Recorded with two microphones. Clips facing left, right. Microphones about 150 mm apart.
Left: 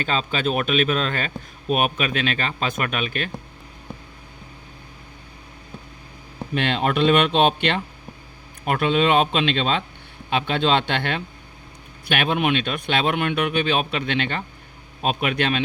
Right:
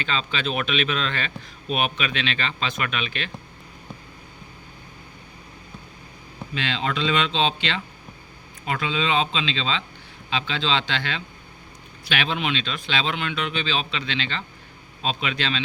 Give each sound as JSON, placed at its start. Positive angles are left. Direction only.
{"t": 0.0, "sound": "a man's voice", "side_deg": 45}
{"t": 6.5, "sound": "a man's voice", "side_deg": 55}